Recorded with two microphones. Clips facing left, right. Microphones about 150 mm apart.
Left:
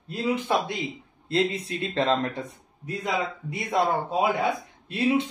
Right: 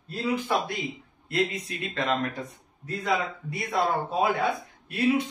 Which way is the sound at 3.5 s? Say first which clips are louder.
Left 2 dB; 20° left (ahead or behind).